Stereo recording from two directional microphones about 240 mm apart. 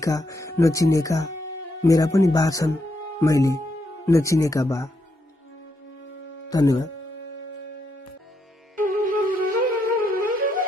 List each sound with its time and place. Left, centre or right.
0.0 s speech: centre
6.5 s speech: centre
8.7 s wind instrument: right